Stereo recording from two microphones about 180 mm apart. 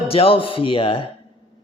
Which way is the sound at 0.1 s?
30° left (ahead or behind).